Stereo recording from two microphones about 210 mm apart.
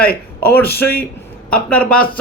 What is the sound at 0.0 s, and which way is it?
Speech, 45° left (ahead or behind).